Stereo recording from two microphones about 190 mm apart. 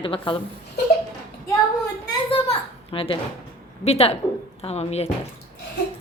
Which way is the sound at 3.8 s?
30° left (ahead or behind).